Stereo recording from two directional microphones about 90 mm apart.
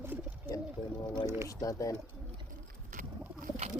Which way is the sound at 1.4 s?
40° left (ahead or behind).